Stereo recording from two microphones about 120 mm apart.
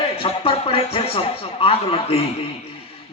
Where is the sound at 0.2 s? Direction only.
50° left (ahead or behind).